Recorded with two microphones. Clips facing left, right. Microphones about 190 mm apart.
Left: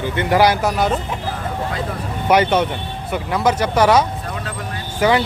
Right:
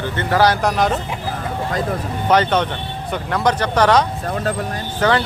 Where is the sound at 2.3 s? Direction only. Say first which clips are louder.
Left 1 dB; 10° left (ahead or behind).